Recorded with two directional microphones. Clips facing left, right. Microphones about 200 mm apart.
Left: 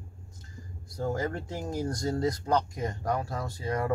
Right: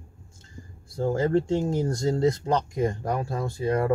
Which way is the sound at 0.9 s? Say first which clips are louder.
Right 7 dB; 30° right (ahead or behind).